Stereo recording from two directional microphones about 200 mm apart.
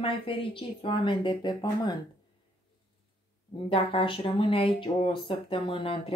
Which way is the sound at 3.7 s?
25° left (ahead or behind).